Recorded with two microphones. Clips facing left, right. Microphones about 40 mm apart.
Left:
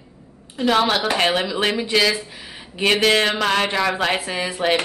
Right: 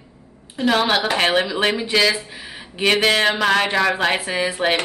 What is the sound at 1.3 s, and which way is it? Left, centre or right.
Speech, centre.